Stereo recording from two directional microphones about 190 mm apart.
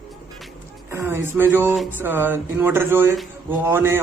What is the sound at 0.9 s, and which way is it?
Speech, 15° right (ahead or behind).